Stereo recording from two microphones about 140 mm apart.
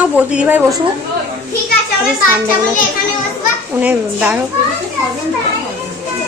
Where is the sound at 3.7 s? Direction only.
10° right (ahead or behind).